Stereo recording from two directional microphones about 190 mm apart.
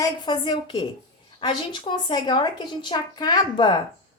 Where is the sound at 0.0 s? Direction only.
25° left (ahead or behind).